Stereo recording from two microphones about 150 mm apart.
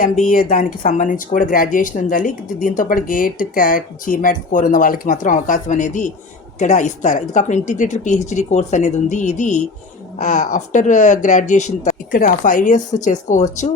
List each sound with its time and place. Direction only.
0.0 s speech: 65° left (ahead or behind)